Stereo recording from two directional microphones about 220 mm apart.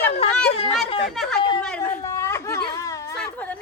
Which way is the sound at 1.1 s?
Centre (ahead or behind).